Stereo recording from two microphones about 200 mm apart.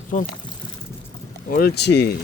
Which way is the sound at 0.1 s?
40° left (ahead or behind).